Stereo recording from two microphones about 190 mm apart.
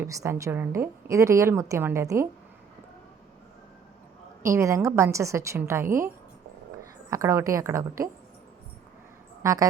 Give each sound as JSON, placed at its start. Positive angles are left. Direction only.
{"t": 0.0, "sound": "a woman's voice", "side_deg": -15}
{"t": 4.4, "sound": "a woman's voice", "side_deg": -15}
{"t": 7.1, "sound": "a woman's voice", "side_deg": -15}
{"t": 9.4, "sound": "a woman's voice", "side_deg": -15}